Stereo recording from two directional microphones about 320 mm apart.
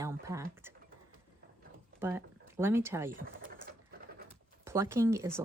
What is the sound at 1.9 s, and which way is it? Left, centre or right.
Speech, centre.